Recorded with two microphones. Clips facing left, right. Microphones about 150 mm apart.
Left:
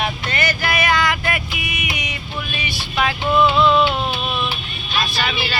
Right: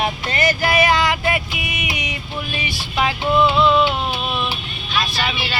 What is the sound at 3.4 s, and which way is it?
Music, 10° right (ahead or behind).